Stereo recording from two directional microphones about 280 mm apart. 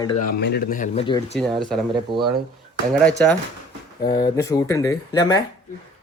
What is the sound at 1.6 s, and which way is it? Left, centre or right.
Speech, centre.